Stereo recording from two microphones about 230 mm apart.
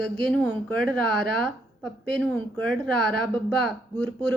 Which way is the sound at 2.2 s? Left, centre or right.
Centre.